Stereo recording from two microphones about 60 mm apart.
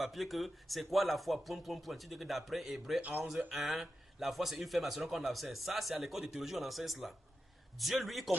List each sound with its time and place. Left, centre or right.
0.0 s a man's voice: centre
3.0 s speech: right
3.5 s a man's voice: centre